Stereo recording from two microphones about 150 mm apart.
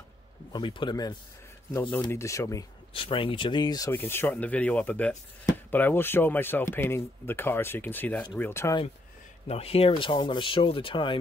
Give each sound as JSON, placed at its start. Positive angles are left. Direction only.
{"t": 0.5, "sound": "speech", "side_deg": 30}
{"t": 1.7, "sound": "speech", "side_deg": 15}
{"t": 2.9, "sound": "speech", "side_deg": 35}
{"t": 3.9, "sound": "speech", "side_deg": 15}
{"t": 9.5, "sound": "speech", "side_deg": 40}